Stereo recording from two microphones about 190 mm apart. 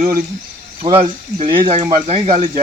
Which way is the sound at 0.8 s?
30° right (ahead or behind).